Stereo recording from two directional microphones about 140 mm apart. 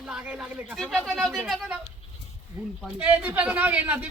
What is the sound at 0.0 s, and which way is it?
Speech, 5° right (ahead or behind).